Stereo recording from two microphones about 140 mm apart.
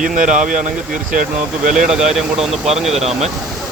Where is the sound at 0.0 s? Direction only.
65° right (ahead or behind).